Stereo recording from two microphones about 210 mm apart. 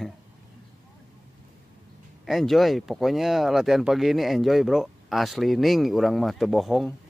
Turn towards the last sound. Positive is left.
turn(degrees=0)  # may be behind; listen again after turning